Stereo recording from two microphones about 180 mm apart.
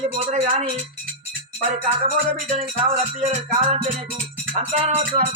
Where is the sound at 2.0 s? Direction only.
35° right (ahead or behind).